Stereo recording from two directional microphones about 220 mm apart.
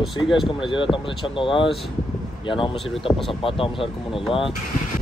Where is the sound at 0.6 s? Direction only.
20° left (ahead or behind).